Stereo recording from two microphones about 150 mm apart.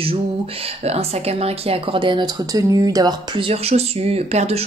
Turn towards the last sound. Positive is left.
turn(degrees=-45)  # may be behind; listen again after turning